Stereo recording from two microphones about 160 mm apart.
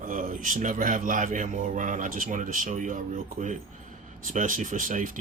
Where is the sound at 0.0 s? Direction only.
55° right (ahead or behind).